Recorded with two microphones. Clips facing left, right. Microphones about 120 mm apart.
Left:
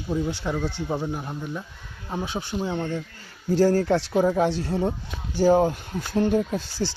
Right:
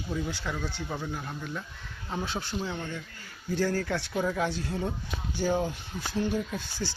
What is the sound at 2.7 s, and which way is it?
Speech, 30° left (ahead or behind).